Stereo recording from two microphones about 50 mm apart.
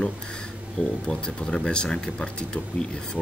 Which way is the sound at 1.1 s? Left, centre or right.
Centre.